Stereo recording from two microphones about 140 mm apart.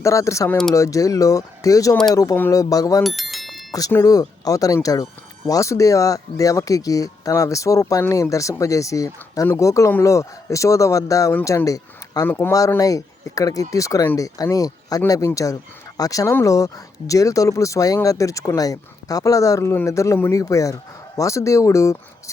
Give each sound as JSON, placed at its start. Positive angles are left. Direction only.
{"t": 0.0, "sound": "speech", "side_deg": 20}
{"t": 3.0, "sound": "bicycle bell", "side_deg": 0}
{"t": 3.7, "sound": "speech", "side_deg": 25}